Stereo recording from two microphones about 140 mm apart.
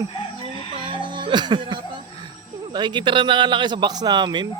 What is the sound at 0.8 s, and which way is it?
Music, 35° right (ahead or behind).